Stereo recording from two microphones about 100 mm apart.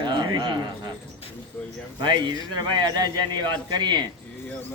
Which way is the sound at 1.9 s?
50° right (ahead or behind).